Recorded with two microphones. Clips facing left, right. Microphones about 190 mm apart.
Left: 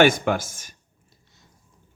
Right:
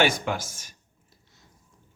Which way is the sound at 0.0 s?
50° left (ahead or behind).